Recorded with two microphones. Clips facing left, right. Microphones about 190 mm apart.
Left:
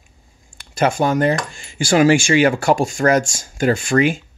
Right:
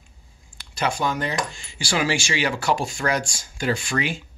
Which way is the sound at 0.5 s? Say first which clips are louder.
Left 7 dB; 50° left (ahead or behind).